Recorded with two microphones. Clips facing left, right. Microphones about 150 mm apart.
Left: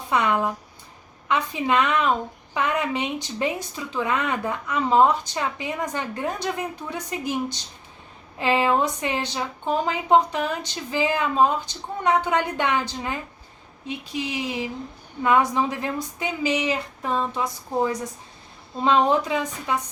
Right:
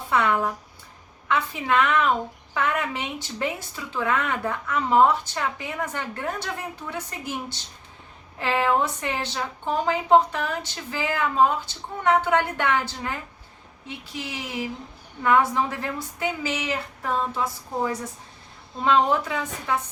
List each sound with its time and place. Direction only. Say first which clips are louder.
0.1 s a woman's voice: left 1 dB; 15° left (ahead or behind)
8.4 s a woman's voice: left 2 dB; 15° left (ahead or behind)